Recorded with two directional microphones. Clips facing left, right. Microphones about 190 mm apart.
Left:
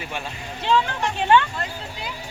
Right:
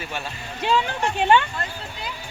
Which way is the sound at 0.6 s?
15° right (ahead or behind).